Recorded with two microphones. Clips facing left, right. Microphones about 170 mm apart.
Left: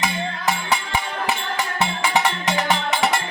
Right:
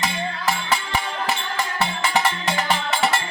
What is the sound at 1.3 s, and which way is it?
Music, 15° left (ahead or behind).